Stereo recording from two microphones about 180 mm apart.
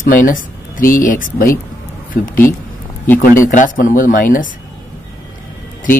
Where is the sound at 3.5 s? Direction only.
45° left (ahead or behind).